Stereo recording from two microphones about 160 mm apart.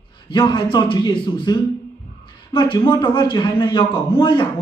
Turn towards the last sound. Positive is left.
turn(degrees=30)  # may be behind; listen again after turning